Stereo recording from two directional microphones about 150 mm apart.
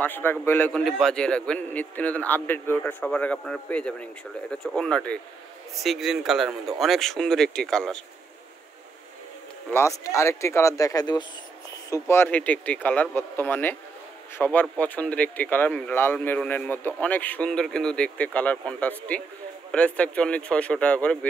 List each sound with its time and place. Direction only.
0.0 s a man's voice: 15° left (ahead or behind)
9.7 s speech: 20° left (ahead or behind)
11.9 s a man's voice: 15° left (ahead or behind)